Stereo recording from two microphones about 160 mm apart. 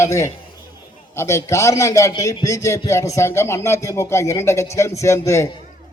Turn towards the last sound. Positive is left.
turn(degrees=15)  # may be behind; listen again after turning